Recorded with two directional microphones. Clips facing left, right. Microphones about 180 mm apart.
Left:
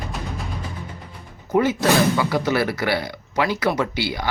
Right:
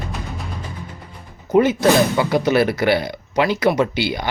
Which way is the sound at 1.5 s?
20° right (ahead or behind).